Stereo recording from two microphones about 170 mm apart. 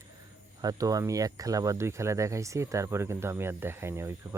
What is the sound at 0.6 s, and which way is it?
Speech, 20° right (ahead or behind).